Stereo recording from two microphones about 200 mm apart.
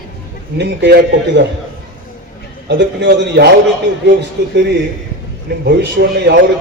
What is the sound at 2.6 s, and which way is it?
Speech, 60° right (ahead or behind).